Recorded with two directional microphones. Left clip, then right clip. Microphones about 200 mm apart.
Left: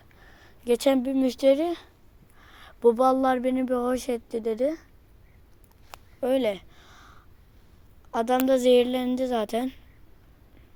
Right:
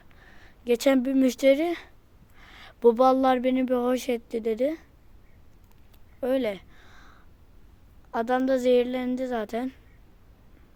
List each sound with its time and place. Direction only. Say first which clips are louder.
0.2 s speech: even; 10° right (ahead or behind)
6.1 s a sound: left 2 dB; centre (ahead or behind)
8.1 s a woman's voice: left 2 dB; centre (ahead or behind)